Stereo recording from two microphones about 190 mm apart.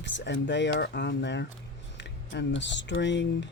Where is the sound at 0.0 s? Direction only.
70° left (ahead or behind).